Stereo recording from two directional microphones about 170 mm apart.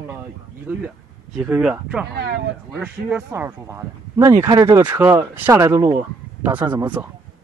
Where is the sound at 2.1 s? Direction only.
75° right (ahead or behind).